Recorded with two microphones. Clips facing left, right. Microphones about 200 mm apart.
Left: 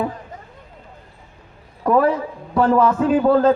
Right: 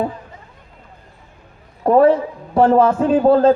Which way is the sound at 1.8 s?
30° right (ahead or behind).